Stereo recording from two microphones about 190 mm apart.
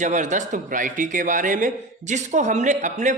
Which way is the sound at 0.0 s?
40° right (ahead or behind).